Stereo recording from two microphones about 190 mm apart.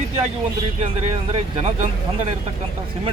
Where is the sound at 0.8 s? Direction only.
35° right (ahead or behind).